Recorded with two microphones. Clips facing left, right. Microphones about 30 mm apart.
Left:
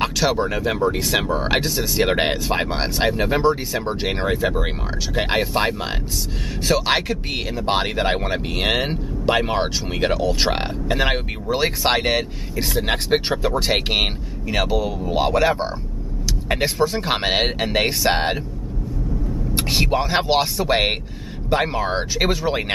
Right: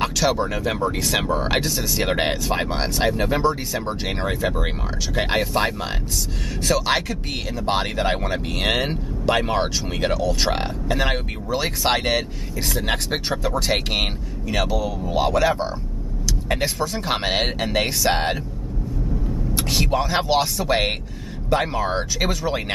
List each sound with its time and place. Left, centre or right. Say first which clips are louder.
0.0 s speech: left 1 dB; centre
19.5 s speech: left 2 dB; centre